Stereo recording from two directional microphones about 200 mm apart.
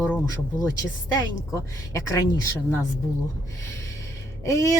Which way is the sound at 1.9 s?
15° left (ahead or behind).